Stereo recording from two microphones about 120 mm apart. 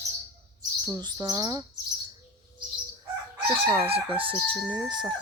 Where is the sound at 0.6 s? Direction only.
30° right (ahead or behind).